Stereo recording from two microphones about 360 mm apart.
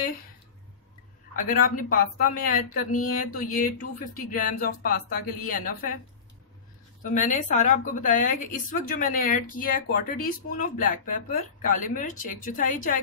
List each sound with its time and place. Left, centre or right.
1.3 s a woman's voice: left
7.2 s a woman's voice: centre